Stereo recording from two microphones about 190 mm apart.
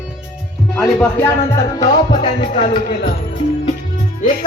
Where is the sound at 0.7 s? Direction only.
10° left (ahead or behind).